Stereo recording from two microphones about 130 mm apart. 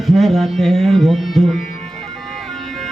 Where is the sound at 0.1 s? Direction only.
Centre (ahead or behind).